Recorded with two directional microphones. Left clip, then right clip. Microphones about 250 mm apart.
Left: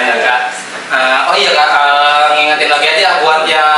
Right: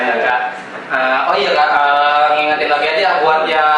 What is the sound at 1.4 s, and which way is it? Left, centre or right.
A man's voice, centre.